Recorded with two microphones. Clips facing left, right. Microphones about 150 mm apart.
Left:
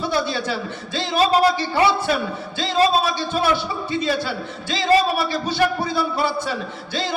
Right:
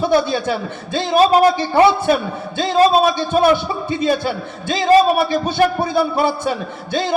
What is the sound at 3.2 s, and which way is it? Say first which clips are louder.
A man's voice: right 6 dB; 50° right (ahead or behind).